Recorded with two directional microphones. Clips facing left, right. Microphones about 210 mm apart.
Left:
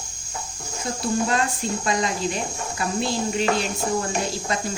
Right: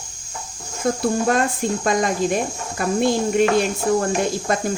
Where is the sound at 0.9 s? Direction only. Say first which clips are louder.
Right 5 dB; 50° right (ahead or behind).